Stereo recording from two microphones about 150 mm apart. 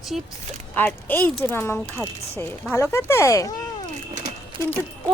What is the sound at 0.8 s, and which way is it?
Speech, 10° left (ahead or behind).